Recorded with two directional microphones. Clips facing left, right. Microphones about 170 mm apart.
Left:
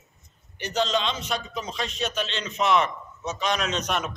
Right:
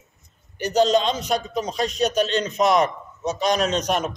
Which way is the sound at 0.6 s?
40° right (ahead or behind).